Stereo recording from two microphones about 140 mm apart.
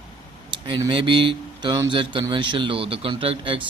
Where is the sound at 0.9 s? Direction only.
35° right (ahead or behind).